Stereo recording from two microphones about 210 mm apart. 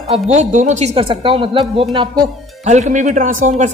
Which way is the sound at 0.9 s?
25° right (ahead or behind).